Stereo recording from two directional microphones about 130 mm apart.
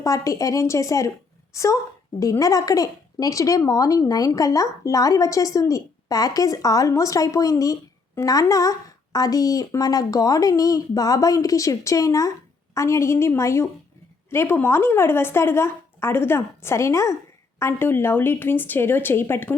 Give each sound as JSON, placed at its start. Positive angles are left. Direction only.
{"t": 0.0, "sound": "a woman's voice", "side_deg": 25}